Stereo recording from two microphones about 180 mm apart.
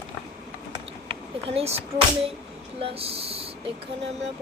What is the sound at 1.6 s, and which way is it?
Speech, 35° right (ahead or behind).